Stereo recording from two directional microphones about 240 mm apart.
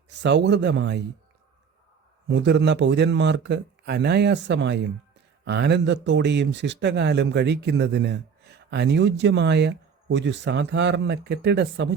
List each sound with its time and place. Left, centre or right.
0.1 s speech: right
2.3 s speech: right